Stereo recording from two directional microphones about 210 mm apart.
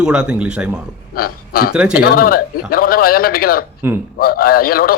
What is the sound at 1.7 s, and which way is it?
Speech, 5° right (ahead or behind).